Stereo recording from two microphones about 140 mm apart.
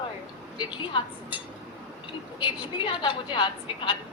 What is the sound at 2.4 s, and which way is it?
A woman's voice, 35° left (ahead or behind).